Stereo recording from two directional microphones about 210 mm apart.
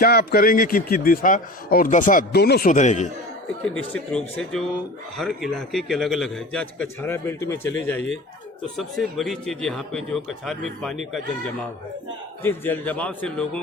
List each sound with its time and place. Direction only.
0.0 s a man's voice: 50° left (ahead or behind)
3.6 s a man's voice: 5° left (ahead or behind)
12.4 s a man's voice: 10° left (ahead or behind)